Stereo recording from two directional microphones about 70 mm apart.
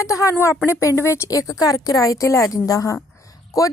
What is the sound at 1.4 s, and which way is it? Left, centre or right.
A woman's voice, left.